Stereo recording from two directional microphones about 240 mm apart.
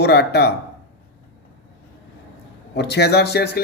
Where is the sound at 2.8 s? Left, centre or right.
Left.